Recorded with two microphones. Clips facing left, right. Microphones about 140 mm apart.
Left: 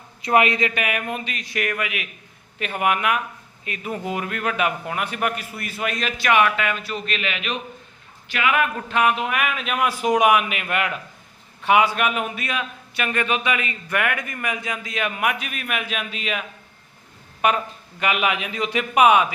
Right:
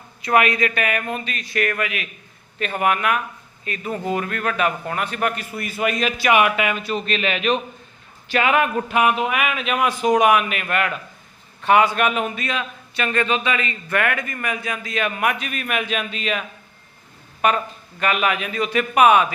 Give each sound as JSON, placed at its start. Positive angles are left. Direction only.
{"t": 0.2, "sound": "a man's voice", "side_deg": 25}
{"t": 7.0, "sound": "a man's voice", "side_deg": -35}
{"t": 8.9, "sound": "a man's voice", "side_deg": -5}
{"t": 17.4, "sound": "a man's voice", "side_deg": 15}